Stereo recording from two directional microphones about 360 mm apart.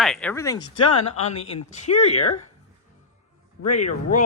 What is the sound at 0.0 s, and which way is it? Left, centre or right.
Speech, centre.